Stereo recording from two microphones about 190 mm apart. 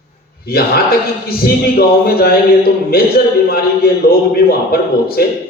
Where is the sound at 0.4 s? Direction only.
55° left (ahead or behind).